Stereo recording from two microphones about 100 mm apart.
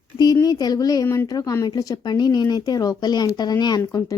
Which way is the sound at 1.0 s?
25° left (ahead or behind).